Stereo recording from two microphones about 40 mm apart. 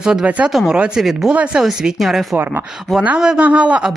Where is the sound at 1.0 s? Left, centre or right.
Centre.